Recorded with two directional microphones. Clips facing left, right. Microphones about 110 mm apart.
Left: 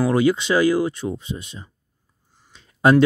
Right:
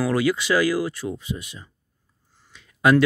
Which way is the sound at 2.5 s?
30° left (ahead or behind).